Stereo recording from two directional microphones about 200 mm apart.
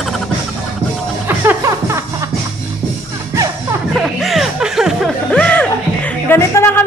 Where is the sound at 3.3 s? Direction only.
15° right (ahead or behind).